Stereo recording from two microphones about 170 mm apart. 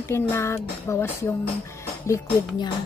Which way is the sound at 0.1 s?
15° left (ahead or behind).